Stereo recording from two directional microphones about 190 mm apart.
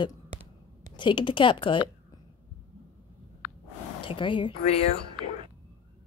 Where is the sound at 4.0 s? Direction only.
25° left (ahead or behind).